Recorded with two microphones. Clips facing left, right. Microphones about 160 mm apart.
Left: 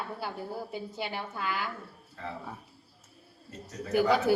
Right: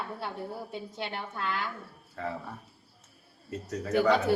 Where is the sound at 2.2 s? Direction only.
55° right (ahead or behind).